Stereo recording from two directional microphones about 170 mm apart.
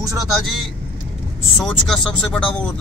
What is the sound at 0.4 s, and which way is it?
Speech, centre (ahead or behind).